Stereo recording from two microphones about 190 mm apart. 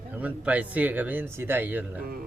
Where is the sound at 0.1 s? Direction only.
10° right (ahead or behind).